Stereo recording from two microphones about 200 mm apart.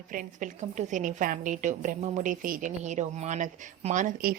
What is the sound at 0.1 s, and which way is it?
A woman's voice, 40° right (ahead or behind).